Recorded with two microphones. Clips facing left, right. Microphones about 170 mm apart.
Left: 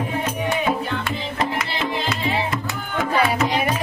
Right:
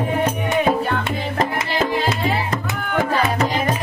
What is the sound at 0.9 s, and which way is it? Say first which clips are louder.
Music: right 3 dB; 45° right (ahead or behind).